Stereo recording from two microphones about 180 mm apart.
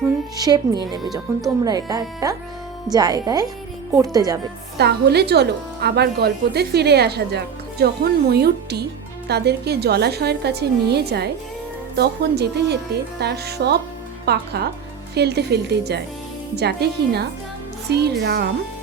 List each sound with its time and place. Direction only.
0.3 s speech: 20° right (ahead or behind)
4.8 s speech: 65° right (ahead or behind)